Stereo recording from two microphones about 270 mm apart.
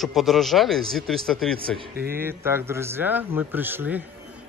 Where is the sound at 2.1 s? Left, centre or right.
Centre.